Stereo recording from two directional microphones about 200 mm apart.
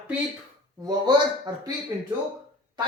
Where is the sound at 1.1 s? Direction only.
20° right (ahead or behind).